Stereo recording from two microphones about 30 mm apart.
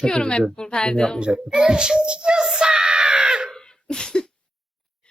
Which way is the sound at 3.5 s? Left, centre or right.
Left.